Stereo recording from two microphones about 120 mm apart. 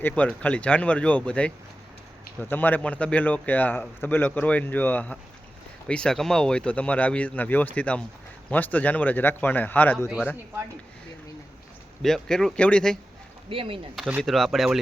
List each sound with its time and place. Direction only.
0.0 s speech: 10° left (ahead or behind)
12.0 s speech: 5° left (ahead or behind)
13.5 s speech: 50° right (ahead or behind)
14.2 s speech: centre (ahead or behind)